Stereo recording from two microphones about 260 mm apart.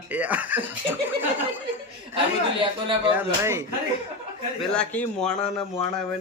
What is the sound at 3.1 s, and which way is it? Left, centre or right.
Speech, centre.